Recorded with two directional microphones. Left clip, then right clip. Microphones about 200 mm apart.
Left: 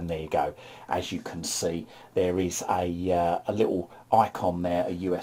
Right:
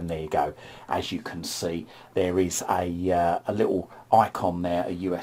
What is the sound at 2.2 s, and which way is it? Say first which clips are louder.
Speech: right 2 dB; 10° right (ahead or behind).